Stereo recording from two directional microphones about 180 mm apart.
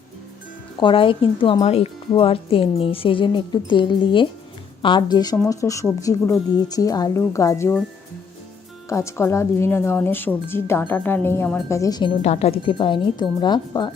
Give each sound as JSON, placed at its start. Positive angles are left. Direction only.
{"t": 0.8, "sound": "speech", "side_deg": 30}
{"t": 8.9, "sound": "speech", "side_deg": 15}
{"t": 11.8, "sound": "speech", "side_deg": 20}
{"t": 12.2, "sound": "speech", "side_deg": 35}